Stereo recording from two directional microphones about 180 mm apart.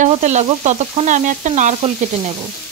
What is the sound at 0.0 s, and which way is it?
Stir, 40° right (ahead or behind).